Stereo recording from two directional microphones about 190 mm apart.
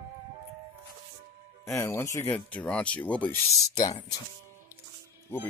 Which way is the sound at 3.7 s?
20° left (ahead or behind).